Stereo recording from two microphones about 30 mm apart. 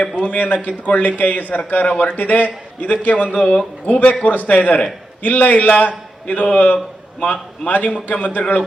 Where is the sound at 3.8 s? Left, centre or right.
Left.